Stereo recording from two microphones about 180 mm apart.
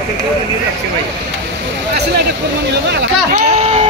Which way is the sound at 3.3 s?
35° right (ahead or behind).